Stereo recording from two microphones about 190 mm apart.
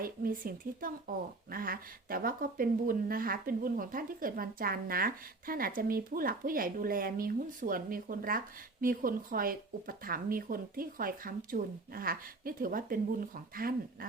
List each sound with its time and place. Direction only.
0.0 s speech: 50° right (ahead or behind)